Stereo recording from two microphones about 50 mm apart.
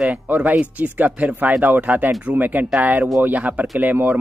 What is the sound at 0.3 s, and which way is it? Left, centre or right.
A man's voice, right.